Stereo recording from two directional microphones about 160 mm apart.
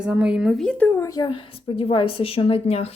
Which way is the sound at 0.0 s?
5° right (ahead or behind).